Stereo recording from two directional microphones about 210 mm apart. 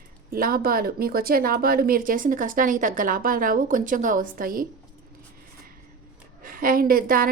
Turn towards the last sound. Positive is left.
turn(degrees=-45)  # may be behind; listen again after turning